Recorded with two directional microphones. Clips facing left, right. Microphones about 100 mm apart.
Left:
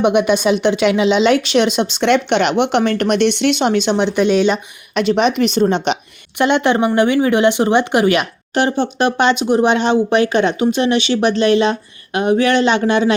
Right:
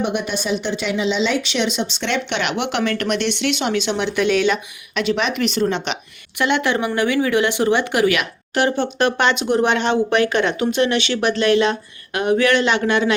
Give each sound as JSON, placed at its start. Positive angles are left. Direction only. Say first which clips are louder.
{"t": 0.0, "sound": "speech", "louder": "left 9 dB", "side_deg": 70}
{"t": 2.6, "sound": "speech", "louder": "left 6 dB", "side_deg": 30}
{"t": 4.9, "sound": "a woman's voice", "louder": "left 6 dB", "side_deg": 40}